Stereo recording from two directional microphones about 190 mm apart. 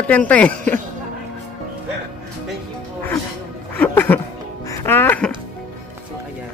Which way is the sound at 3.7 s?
10° left (ahead or behind).